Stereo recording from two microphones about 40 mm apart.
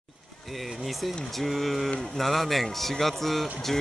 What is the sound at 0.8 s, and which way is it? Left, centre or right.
Speech, centre.